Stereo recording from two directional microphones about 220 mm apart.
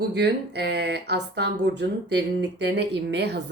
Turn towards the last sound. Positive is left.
turn(degrees=-50)  # may be behind; listen again after turning